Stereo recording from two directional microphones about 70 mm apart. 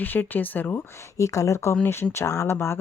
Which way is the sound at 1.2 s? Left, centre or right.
Left.